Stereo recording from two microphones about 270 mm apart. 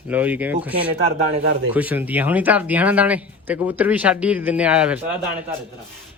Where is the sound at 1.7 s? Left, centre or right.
Centre.